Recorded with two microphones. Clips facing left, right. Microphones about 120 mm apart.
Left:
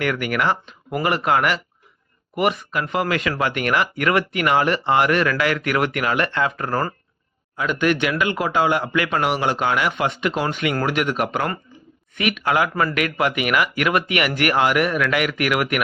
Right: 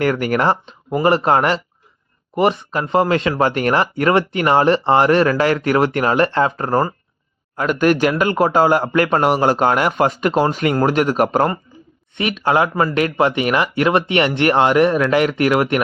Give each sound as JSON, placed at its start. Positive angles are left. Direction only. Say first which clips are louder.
{"t": 0.0, "sound": "speech", "louder": "right 5 dB", "side_deg": -35}
{"t": 7.5, "sound": "a man's voice", "louder": "right 5 dB", "side_deg": -45}